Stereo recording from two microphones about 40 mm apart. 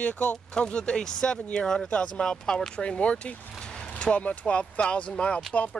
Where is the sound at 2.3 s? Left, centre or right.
Centre.